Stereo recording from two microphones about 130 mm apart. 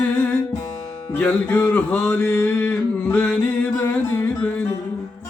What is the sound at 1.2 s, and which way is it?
Mantra, 10° left (ahead or behind).